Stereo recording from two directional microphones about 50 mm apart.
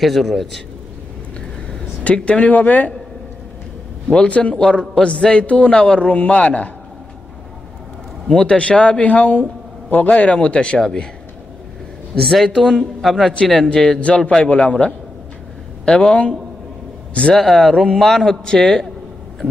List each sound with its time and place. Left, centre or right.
0.0 s speech: centre
2.3 s a man's voice: left
4.1 s a man's voice: left
8.5 s a man's voice: left
12.2 s speech: centre
13.3 s a man's voice: centre
17.5 s a man's voice: centre